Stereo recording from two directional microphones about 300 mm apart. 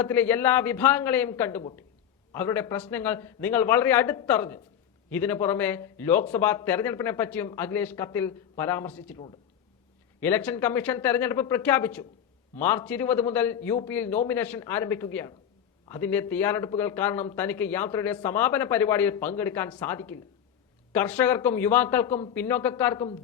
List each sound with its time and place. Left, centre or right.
0.0 s a man's voice: centre